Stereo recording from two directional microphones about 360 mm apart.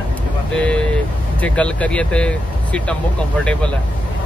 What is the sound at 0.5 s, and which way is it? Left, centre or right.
Speech, centre.